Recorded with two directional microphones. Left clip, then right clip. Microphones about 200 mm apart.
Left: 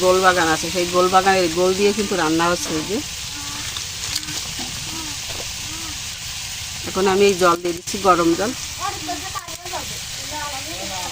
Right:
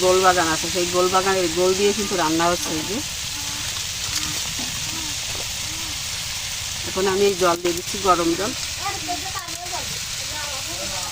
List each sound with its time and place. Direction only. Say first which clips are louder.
0.1 s speech: left 2 dB; 35° left (ahead or behind)
6.9 s speech: left 4 dB; 40° left (ahead or behind)